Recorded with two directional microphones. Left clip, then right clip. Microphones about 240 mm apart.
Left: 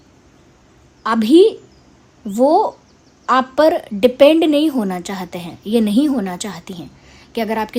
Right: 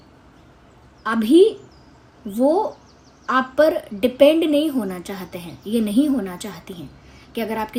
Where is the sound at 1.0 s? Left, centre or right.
Left.